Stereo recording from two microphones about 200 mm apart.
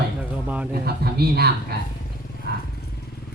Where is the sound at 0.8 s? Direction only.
50° right (ahead or behind).